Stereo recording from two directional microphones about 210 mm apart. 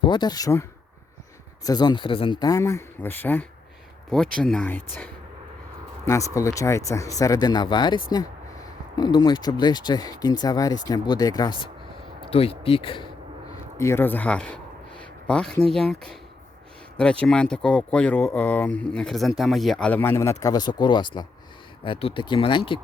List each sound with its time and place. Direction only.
0.0 s speech: 20° left (ahead or behind)
1.6 s speech: 20° left (ahead or behind)
6.1 s speech: 15° left (ahead or behind)
13.7 s speech: 10° left (ahead or behind)